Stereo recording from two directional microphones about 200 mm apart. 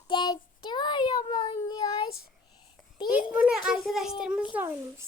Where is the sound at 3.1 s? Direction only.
5° right (ahead or behind).